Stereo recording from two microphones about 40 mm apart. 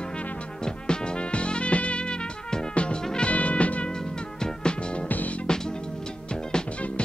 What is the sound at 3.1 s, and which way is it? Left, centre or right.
Music, left.